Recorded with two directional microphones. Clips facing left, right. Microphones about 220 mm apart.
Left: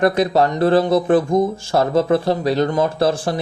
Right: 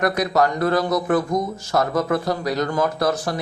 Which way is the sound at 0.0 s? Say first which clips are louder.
Left 4 dB; 30° left (ahead or behind).